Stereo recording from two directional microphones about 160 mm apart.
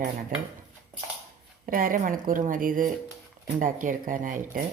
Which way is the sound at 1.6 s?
60° right (ahead or behind).